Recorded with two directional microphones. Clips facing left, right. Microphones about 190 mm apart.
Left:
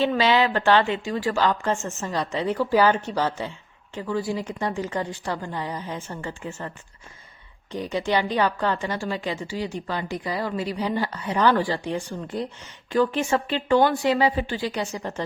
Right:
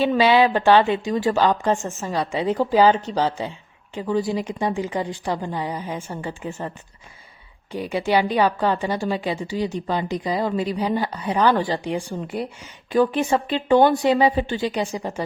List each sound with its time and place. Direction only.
0.0 s a woman's voice: 15° right (ahead or behind)
7.7 s a woman's voice: 10° right (ahead or behind)